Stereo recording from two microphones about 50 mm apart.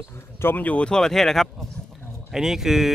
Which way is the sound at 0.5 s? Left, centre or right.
Left.